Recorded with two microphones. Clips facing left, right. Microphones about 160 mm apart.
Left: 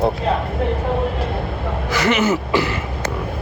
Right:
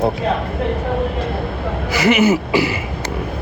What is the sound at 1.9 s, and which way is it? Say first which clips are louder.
Speech: right 4 dB; 10° right (ahead or behind).